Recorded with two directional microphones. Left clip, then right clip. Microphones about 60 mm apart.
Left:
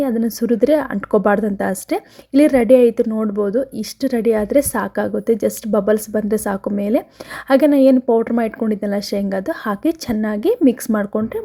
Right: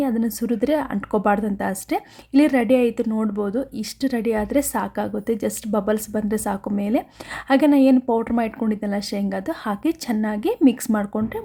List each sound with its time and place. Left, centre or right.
0.0 s a woman's voice: left
3.3 s a woman's voice: left
8.7 s a woman's voice: left